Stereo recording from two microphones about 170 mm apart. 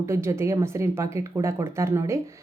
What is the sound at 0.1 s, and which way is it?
Speech, 15° right (ahead or behind).